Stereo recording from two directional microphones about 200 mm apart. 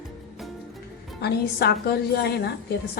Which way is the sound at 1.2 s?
55° left (ahead or behind).